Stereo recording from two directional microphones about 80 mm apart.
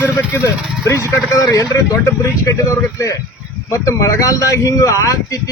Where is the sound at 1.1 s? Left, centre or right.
Left.